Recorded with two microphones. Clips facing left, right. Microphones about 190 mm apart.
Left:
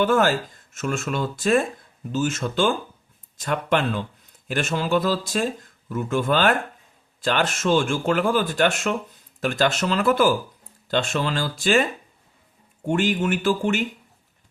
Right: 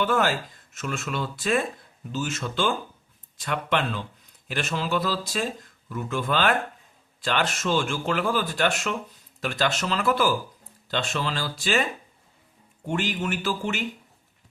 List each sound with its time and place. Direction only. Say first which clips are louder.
0.0 s speech: left 4 dB; 45° left (ahead or behind)
12.9 s speech: left 6 dB; 50° left (ahead or behind)